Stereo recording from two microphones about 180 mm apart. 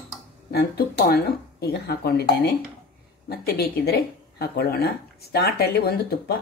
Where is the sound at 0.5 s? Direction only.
60° left (ahead or behind).